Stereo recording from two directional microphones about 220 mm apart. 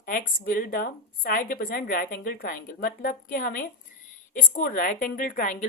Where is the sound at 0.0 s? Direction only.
40° left (ahead or behind).